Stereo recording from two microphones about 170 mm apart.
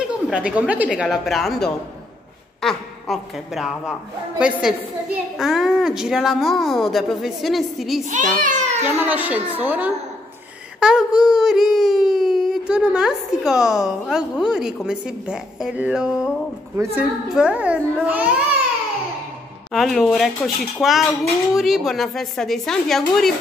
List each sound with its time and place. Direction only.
0.3 s a woman's voice: 5° right (ahead or behind)
8.1 s a child's voice: 45° right (ahead or behind)
8.8 s a woman's voice: 10° right (ahead or behind)
19.7 s speech: centre (ahead or behind)